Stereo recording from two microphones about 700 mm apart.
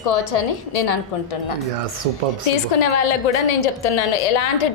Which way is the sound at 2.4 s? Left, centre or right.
Left.